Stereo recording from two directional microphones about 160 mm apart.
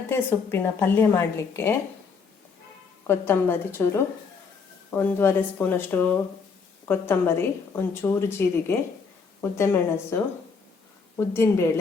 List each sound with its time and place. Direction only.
0.1 s a woman's voice: 15° left (ahead or behind)
3.1 s a woman's voice: 15° left (ahead or behind)
11.3 s a woman's voice: 15° left (ahead or behind)